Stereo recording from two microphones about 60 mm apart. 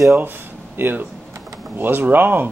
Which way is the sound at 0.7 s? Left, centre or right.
Right.